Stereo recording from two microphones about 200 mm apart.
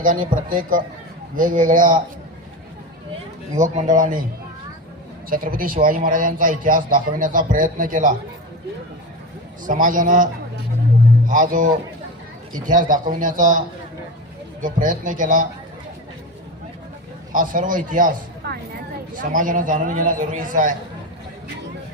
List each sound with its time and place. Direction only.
0.0 s a man's voice: 45° right (ahead or behind)
3.5 s a man's voice: 35° right (ahead or behind)
5.3 s a man's voice: 45° right (ahead or behind)
9.6 s a man's voice: 40° right (ahead or behind)
11.3 s a man's voice: 40° right (ahead or behind)
17.3 s a man's voice: 40° right (ahead or behind)